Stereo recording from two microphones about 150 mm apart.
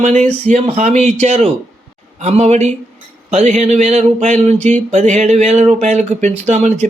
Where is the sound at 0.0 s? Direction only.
50° right (ahead or behind).